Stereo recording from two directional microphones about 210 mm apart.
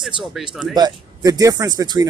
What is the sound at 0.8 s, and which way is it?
Speech, 20° right (ahead or behind).